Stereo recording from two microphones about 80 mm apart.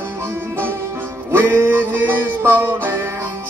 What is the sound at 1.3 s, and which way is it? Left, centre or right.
Music, right.